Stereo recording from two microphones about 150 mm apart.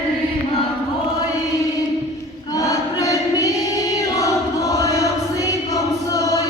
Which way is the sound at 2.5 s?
25° left (ahead or behind).